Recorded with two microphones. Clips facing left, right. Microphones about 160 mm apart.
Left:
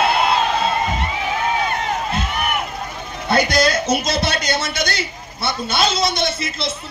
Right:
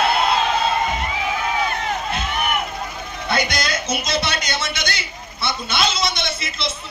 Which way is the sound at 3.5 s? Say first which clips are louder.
Left 7 dB; 35° left (ahead or behind).